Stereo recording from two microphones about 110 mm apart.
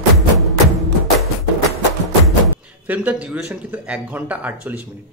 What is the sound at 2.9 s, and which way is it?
Speech, 15° right (ahead or behind).